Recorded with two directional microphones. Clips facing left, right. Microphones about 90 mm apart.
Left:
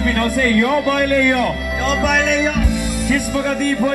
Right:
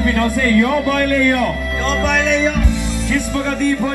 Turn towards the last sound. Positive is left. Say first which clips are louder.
# even
turn(degrees=5)  # may be behind; listen again after turning